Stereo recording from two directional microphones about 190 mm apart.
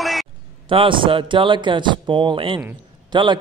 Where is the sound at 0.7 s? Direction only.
25° right (ahead or behind).